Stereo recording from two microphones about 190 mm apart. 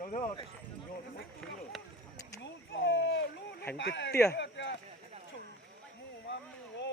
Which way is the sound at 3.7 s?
70° left (ahead or behind).